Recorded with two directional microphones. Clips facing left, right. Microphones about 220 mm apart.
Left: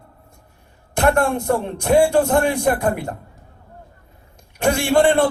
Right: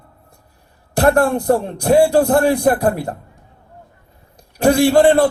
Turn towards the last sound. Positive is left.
turn(degrees=-35)  # may be behind; listen again after turning